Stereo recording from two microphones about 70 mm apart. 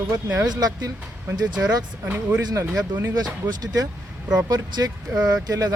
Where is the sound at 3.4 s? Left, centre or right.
Right.